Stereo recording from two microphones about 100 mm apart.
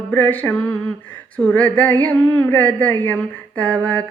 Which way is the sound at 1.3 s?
15° left (ahead or behind).